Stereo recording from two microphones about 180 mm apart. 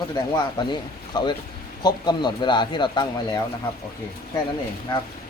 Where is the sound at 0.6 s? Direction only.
25° left (ahead or behind).